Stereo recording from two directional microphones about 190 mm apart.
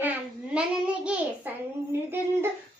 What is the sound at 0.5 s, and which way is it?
Child singing, 5° right (ahead or behind).